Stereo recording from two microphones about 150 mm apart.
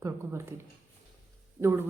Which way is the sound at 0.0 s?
15° right (ahead or behind).